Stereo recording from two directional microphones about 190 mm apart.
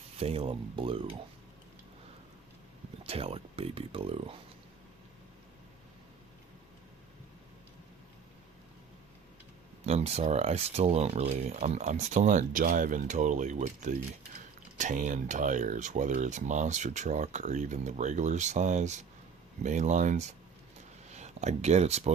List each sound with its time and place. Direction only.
0.2 s speech: 30° right (ahead or behind)
3.0 s speech: 30° right (ahead or behind)
9.8 s speech: 35° right (ahead or behind)